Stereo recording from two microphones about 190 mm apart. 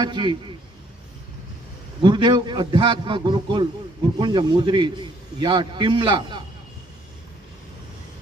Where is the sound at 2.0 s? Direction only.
25° right (ahead or behind).